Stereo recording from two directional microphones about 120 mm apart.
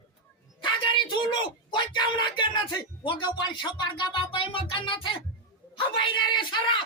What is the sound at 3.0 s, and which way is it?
Speech, 40° left (ahead or behind).